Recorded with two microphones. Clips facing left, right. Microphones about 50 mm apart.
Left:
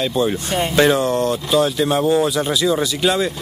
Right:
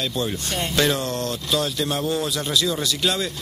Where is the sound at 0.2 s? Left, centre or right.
Centre.